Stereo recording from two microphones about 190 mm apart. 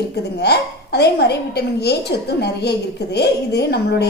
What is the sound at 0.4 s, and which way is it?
A woman's voice, 60° left (ahead or behind).